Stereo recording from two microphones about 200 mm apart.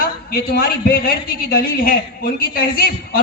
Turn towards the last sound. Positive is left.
turn(degrees=45)  # may be behind; listen again after turning